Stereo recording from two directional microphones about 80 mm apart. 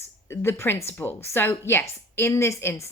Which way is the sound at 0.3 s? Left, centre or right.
Left.